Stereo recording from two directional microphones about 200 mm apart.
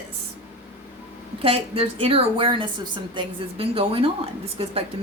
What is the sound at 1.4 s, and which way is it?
Speech, 30° right (ahead or behind).